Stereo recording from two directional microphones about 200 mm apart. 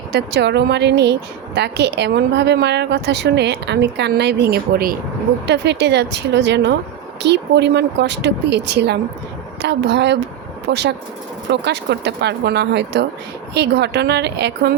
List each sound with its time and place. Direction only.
0.1 s speech: 55° right (ahead or behind)